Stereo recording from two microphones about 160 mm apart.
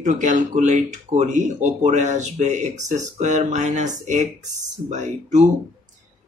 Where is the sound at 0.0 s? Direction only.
50° right (ahead or behind).